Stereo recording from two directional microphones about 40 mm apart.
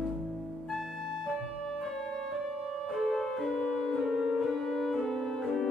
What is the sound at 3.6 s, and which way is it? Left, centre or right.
Music, left.